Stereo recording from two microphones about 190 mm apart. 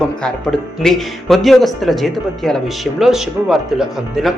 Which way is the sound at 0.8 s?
Centre (ahead or behind).